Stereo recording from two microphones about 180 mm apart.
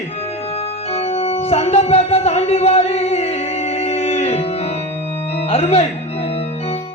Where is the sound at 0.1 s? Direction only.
35° left (ahead or behind).